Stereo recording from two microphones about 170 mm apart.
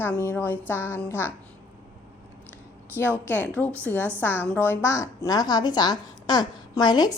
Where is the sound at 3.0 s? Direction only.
15° left (ahead or behind).